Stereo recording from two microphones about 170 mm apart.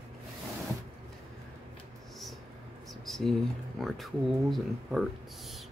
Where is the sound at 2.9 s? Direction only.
Centre (ahead or behind).